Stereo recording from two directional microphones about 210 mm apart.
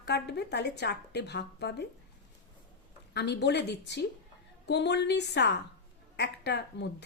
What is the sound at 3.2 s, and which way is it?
Speech, 55° left (ahead or behind).